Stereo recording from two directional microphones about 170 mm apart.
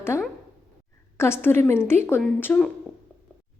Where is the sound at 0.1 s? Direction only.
15° left (ahead or behind).